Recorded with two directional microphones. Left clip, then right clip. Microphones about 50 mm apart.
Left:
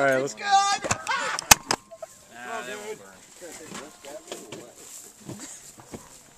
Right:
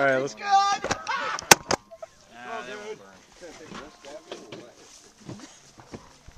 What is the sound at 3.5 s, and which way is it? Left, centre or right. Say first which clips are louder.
Speech: left 1 dB; left.